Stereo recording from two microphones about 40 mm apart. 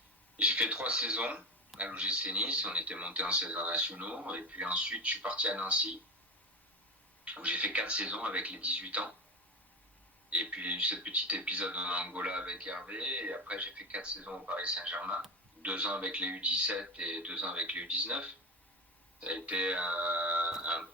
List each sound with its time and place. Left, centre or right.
0.3 s speech: right
7.3 s speech: right
10.2 s speech: right
20.5 s a sound: right